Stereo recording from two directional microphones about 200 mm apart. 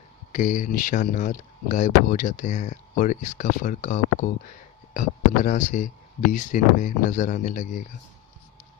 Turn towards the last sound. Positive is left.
turn(degrees=40)  # may be behind; listen again after turning